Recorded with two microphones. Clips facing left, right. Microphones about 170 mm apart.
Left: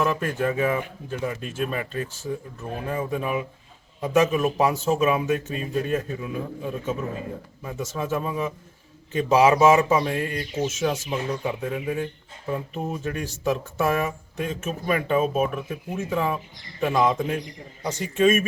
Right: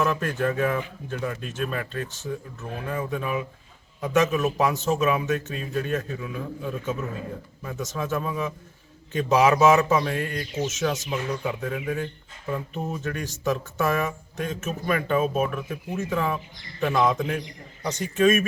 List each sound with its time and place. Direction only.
0.0 s a man's voice: 5° left (ahead or behind)